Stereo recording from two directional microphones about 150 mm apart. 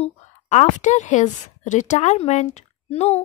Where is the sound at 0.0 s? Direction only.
50° left (ahead or behind).